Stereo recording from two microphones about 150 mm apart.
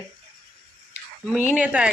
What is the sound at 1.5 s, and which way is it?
Speech, 5° right (ahead or behind).